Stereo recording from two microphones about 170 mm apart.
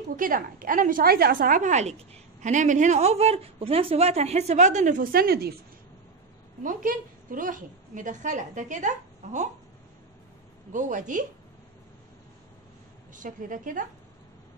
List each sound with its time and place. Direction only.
0.1 s speech: 55° right (ahead or behind)
6.6 s speech: 55° right (ahead or behind)
10.7 s speech: 50° right (ahead or behind)
13.1 s speech: 50° right (ahead or behind)